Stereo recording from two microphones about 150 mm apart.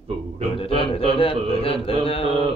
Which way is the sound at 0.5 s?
40° left (ahead or behind).